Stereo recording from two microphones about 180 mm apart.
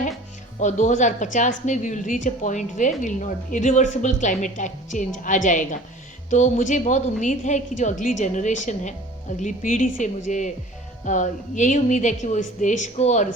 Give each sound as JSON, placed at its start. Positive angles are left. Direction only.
{"t": 0.6, "sound": "a woman's voice", "side_deg": 40}